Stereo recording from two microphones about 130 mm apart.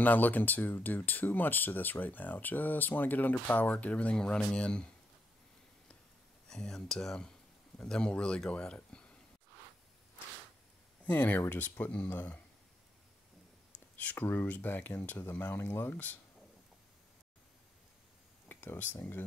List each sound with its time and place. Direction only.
0.0 s speech: 15° left (ahead or behind)
6.5 s speech: 5° left (ahead or behind)
11.1 s speech: 15° left (ahead or behind)
13.9 s speech: 15° left (ahead or behind)
18.5 s speech: 15° left (ahead or behind)